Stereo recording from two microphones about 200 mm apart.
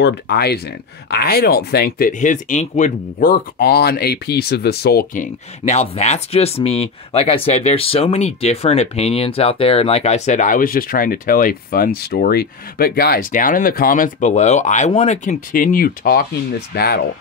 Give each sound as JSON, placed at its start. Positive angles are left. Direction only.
{"t": 0.0, "sound": "speech", "side_deg": 55}